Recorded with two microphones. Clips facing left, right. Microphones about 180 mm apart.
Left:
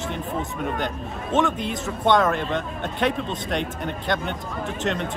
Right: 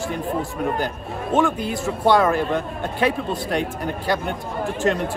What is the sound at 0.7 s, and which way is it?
A man's voice, 5° right (ahead or behind).